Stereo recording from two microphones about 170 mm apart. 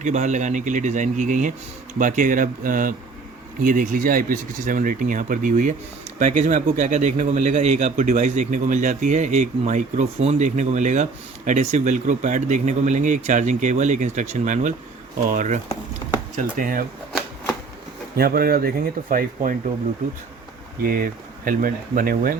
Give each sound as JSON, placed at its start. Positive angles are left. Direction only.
{"t": 0.0, "sound": "speech", "side_deg": -45}
{"t": 18.2, "sound": "speech", "side_deg": -60}
{"t": 20.8, "sound": "speech", "side_deg": -55}